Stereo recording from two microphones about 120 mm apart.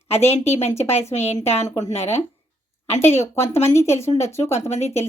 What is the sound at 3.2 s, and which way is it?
Speech, 20° left (ahead or behind).